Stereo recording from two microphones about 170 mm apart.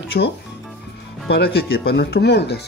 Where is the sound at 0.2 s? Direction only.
85° left.